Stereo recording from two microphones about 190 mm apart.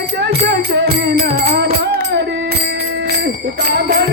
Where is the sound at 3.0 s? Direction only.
55° right (ahead or behind).